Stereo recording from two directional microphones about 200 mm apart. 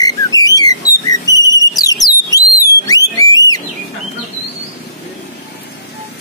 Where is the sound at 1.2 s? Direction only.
65° left (ahead or behind).